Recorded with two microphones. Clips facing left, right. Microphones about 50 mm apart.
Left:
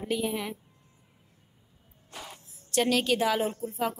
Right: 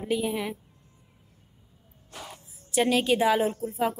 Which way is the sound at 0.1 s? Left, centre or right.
Centre.